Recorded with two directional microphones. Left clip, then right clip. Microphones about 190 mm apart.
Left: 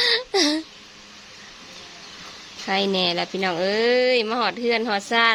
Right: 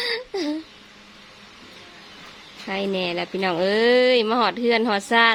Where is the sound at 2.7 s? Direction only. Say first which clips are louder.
Left 3 dB; centre (ahead or behind).